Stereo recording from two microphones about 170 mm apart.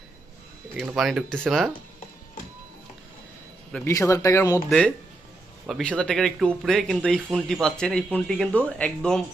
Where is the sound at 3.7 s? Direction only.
15° left (ahead or behind).